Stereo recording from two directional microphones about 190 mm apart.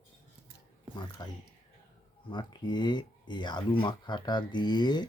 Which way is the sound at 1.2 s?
20° left (ahead or behind).